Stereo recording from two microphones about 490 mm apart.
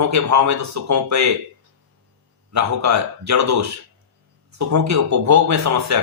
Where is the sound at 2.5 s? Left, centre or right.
Right.